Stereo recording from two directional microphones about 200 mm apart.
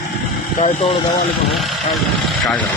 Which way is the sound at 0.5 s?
30° left (ahead or behind).